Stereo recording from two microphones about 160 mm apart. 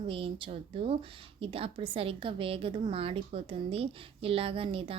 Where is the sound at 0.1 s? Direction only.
35° right (ahead or behind).